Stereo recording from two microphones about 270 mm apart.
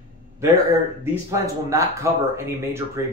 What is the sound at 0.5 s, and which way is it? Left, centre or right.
Speech, centre.